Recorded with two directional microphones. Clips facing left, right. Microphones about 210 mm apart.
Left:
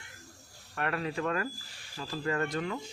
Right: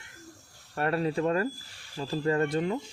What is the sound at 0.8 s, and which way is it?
Speech, 35° right (ahead or behind).